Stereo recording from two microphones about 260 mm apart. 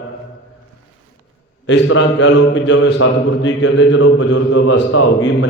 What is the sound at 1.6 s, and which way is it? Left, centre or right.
A man's voice, left.